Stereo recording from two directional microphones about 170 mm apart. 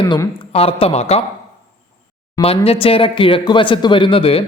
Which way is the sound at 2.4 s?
35° left (ahead or behind).